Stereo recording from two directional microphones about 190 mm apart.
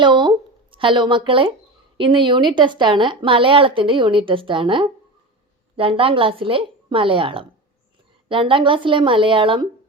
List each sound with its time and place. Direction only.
0.0 s a woman's voice: 25° right (ahead or behind)